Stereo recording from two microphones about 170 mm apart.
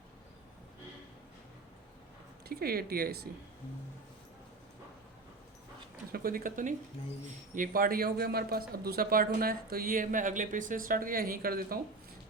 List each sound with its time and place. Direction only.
2.5 s speech: 65° right (ahead or behind)
6.1 s speech: 60° right (ahead or behind)